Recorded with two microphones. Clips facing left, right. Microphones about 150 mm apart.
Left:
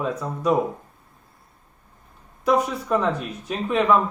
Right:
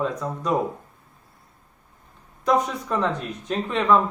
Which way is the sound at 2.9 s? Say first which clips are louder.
Left 2 dB; 5° left (ahead or behind).